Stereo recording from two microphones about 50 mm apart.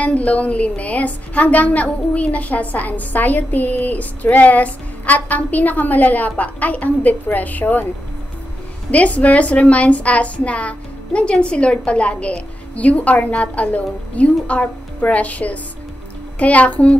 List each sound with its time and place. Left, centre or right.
0.0 s a woman's voice: left
8.9 s a woman's voice: left